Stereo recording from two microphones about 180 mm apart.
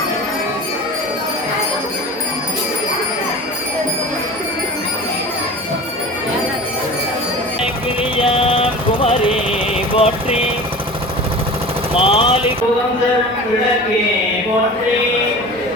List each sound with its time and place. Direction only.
8.1 s a sound: 30° left (ahead or behind)
10.0 s speech: 35° left (ahead or behind)
11.9 s speech: 30° left (ahead or behind)